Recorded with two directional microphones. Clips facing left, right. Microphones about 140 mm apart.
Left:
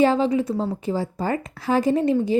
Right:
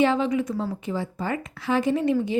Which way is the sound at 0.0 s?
35° left (ahead or behind).